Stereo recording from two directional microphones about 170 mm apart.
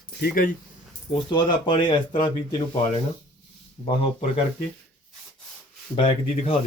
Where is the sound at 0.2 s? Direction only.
65° left (ahead or behind).